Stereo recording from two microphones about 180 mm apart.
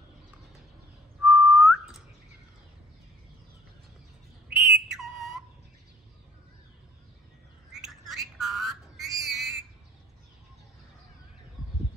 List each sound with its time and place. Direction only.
1.2 s whistling: 5° right (ahead or behind)
4.6 s bird: centre (ahead or behind)
7.7 s a sound: centre (ahead or behind)